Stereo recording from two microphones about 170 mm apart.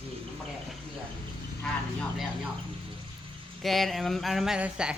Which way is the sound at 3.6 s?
Centre (ahead or behind).